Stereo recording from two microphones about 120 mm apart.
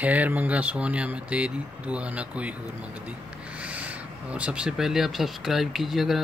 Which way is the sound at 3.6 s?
10° right (ahead or behind).